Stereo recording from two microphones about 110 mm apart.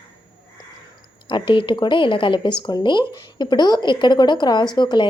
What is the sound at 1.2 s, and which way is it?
A woman's voice, 45° left (ahead or behind).